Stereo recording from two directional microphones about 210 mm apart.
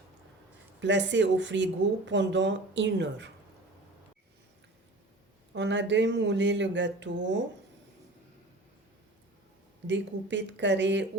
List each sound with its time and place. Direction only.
0.8 s speech: 60° right (ahead or behind)
5.5 s speech: 60° right (ahead or behind)
9.8 s speech: 60° right (ahead or behind)